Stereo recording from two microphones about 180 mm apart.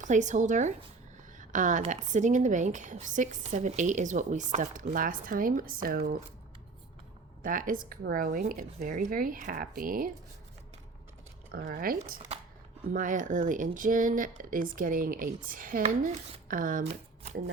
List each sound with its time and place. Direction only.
0.0 s a woman's voice: 40° right (ahead or behind)
7.4 s a woman's voice: 50° right (ahead or behind)
11.5 s a woman's voice: 55° right (ahead or behind)
16.8 s speech: 35° right (ahead or behind)